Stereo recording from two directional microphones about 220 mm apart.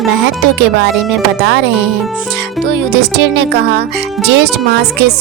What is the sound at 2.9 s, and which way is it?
Speech, 50° right (ahead or behind).